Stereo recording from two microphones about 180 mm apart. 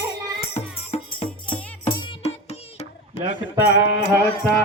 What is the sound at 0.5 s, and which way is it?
Music, 35° left (ahead or behind).